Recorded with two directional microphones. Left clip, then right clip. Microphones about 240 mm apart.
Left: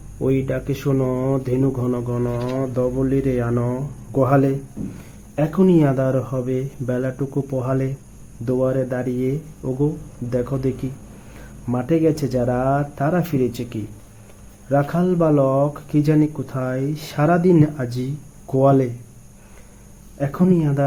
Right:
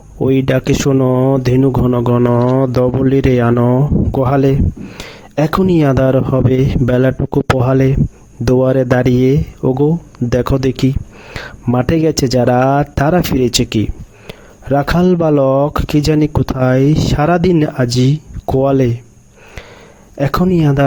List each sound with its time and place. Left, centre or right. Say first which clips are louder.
0.2 s speech: right 8 dB; right
20.1 s speech: right 6 dB; right